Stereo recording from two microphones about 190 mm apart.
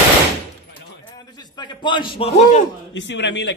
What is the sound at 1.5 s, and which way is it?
A man's voice, 25° left (ahead or behind).